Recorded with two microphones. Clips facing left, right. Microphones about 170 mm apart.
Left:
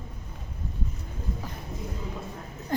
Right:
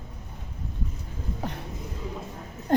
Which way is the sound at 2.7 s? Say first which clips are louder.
Right 7 dB; 65° right (ahead or behind).